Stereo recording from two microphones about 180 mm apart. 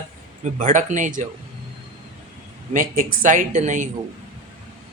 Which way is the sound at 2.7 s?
50° right (ahead or behind).